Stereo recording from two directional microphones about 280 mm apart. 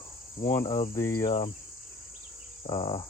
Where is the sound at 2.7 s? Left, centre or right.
Centre.